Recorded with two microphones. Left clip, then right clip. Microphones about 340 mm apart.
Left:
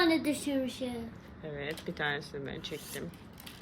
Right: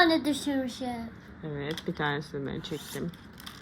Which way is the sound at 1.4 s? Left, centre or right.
Centre.